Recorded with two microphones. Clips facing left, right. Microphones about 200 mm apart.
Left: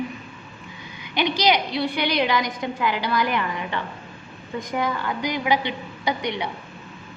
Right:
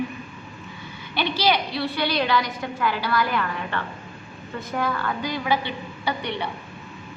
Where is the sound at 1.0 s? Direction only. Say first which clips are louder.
Left 2 dB; 15° left (ahead or behind).